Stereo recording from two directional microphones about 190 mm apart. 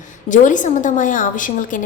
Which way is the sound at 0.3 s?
40° left (ahead or behind).